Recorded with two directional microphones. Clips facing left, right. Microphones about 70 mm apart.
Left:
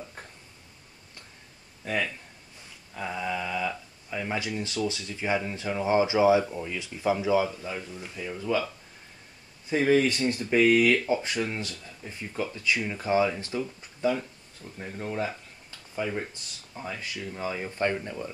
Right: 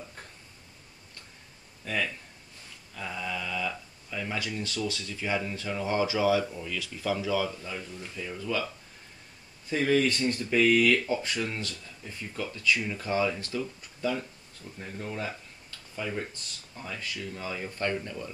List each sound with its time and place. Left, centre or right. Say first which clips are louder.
1.8 s speech: left 2 dB; centre
9.7 s speech: left 3 dB; centre